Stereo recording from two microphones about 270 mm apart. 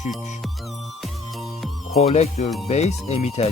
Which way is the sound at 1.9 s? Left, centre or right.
Left.